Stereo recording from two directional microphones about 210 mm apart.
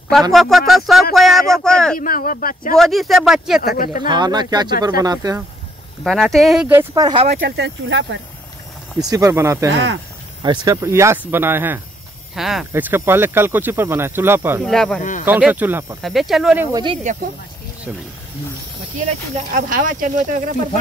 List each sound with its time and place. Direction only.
0.3 s speech: centre (ahead or behind)
2.0 s speech: 40° left (ahead or behind)
2.8 s speech: centre (ahead or behind)
3.6 s speech: 40° left (ahead or behind)
4.1 s speech: 20° right (ahead or behind)
6.0 s speech: centre (ahead or behind); by 7.2 s 20° right (ahead or behind)
7.2 s speech: 50° right (ahead or behind)
9.0 s speech: 15° right (ahead or behind)
14.6 s speech: centre (ahead or behind)
16.7 s speech: 25° right (ahead or behind)
19.5 s speech: 40° right (ahead or behind)